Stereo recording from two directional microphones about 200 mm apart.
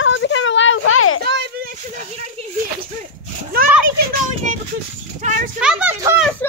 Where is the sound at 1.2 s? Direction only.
60° right (ahead or behind).